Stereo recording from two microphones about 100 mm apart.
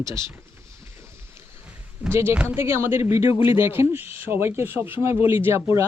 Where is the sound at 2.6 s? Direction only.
25° right (ahead or behind).